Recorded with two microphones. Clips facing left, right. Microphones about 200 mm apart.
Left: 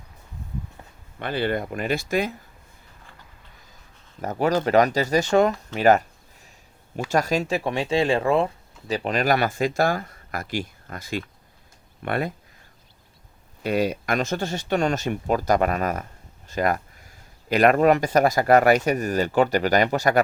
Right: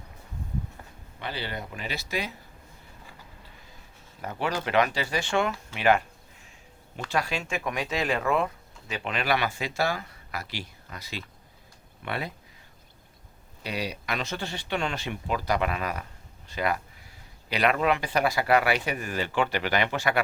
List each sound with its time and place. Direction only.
1.2 s speech: 55° left (ahead or behind)
4.2 s speech: 45° left (ahead or behind)
13.6 s speech: 50° left (ahead or behind)